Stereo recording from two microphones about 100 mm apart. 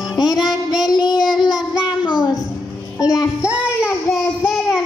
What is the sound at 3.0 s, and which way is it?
Child singing, 35° left (ahead or behind).